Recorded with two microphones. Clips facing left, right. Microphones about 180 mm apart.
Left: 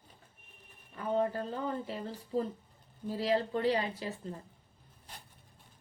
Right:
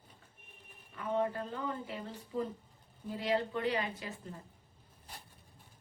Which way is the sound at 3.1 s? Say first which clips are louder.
Left 3 dB; 35° left (ahead or behind).